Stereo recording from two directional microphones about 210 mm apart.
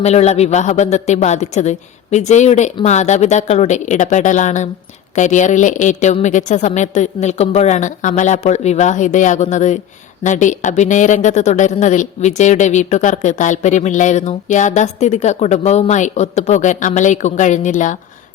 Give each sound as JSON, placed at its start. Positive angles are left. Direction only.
{"t": 0.0, "sound": "a woman's voice", "side_deg": 30}